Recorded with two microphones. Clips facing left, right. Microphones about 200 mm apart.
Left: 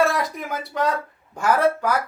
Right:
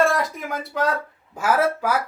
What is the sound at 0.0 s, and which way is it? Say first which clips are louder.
Speech: right 1 dB; centre (ahead or behind).